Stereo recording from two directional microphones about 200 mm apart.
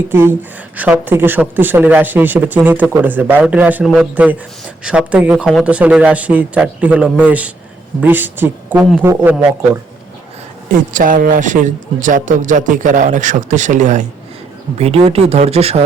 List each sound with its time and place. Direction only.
0.1 s speech: 10° right (ahead or behind)
10.9 s a man's voice: 45° right (ahead or behind)